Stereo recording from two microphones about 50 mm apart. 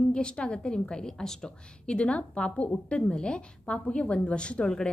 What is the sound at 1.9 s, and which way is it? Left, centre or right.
A woman's voice, left.